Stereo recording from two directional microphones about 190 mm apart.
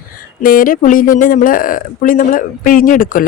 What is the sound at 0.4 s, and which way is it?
Speech, 45° left (ahead or behind).